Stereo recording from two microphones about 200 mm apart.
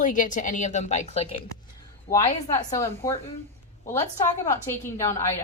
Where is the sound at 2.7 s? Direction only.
15° left (ahead or behind).